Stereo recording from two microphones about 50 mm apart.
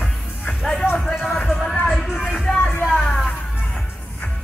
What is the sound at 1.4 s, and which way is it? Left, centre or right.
Music, centre.